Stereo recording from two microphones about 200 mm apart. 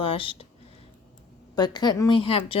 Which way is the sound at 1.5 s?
20° left (ahead or behind).